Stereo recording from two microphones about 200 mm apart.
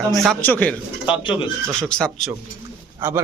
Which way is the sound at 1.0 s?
25° left (ahead or behind).